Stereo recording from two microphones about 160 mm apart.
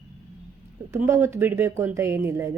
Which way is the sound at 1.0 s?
15° right (ahead or behind).